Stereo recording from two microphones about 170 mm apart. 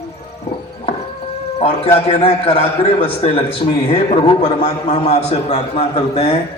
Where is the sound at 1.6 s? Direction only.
35° left (ahead or behind).